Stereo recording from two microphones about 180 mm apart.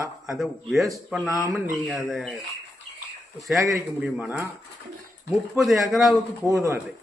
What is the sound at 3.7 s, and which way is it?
Speech, centre (ahead or behind).